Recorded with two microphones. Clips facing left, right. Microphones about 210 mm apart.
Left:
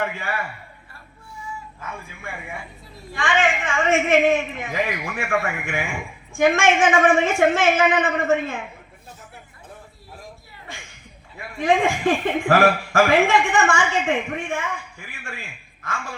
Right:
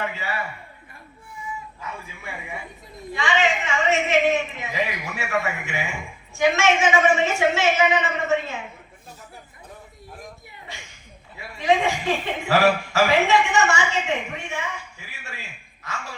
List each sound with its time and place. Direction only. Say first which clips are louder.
0.0 s a man's voice: left 2 dB; 50° left (ahead or behind)
3.2 s a man's voice: left 1 dB; 50° left (ahead or behind)
11.3 s a man's voice: left 1 dB; 50° left (ahead or behind)
15.0 s a man's voice: left 3 dB; 50° left (ahead or behind)